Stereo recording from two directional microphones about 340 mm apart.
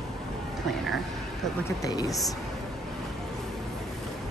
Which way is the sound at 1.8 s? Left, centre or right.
Centre.